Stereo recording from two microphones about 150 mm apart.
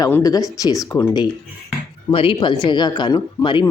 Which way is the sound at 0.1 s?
25° left (ahead or behind).